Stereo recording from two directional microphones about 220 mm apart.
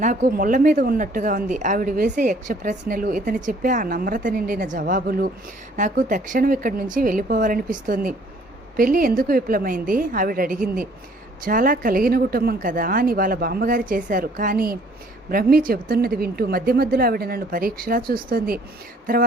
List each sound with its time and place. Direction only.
0.0 s a woman's voice: 35° right (ahead or behind)